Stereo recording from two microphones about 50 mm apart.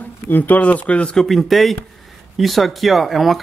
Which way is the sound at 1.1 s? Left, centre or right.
Centre.